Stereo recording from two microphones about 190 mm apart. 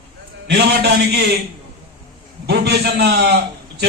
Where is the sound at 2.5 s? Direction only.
60° right (ahead or behind).